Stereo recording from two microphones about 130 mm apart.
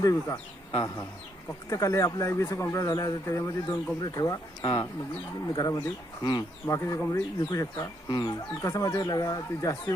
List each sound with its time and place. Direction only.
0.0 s speech: 25° left (ahead or behind)
0.7 s speech: 40° left (ahead or behind)
1.7 s speech: 25° left (ahead or behind)